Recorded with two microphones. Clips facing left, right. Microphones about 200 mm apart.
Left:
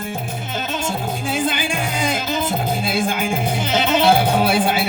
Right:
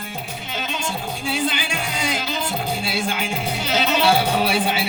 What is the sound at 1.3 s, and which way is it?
Music, 50° left (ahead or behind).